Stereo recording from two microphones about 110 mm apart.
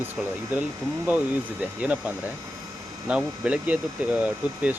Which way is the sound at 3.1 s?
10° right (ahead or behind).